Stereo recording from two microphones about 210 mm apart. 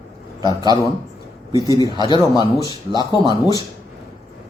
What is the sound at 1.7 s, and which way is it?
Speech, 20° left (ahead or behind).